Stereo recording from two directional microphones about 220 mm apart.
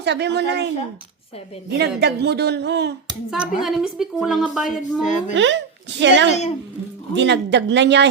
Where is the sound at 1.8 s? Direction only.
50° right (ahead or behind).